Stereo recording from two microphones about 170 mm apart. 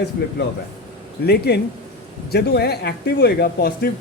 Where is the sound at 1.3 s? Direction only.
70° left (ahead or behind).